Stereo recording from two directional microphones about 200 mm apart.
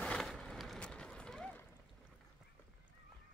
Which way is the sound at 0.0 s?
5° left (ahead or behind).